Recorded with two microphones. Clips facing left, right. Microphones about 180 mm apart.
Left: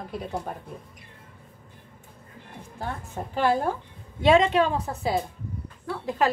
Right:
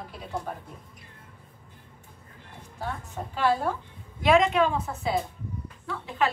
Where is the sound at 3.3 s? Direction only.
50° left (ahead or behind).